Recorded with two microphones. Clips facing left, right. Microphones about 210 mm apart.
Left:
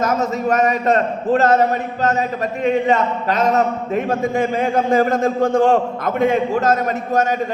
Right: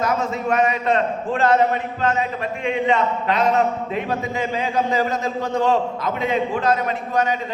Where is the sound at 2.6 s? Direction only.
40° left (ahead or behind).